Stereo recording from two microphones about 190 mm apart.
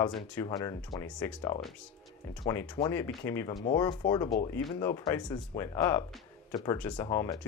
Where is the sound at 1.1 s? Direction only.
5° left (ahead or behind).